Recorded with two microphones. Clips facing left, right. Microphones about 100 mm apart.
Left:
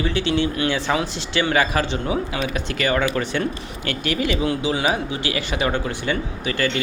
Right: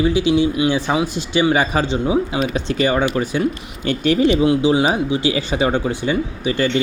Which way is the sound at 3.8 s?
25° right (ahead or behind).